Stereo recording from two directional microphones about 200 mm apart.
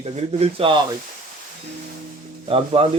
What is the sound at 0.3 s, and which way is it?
Speech, 25° right (ahead or behind).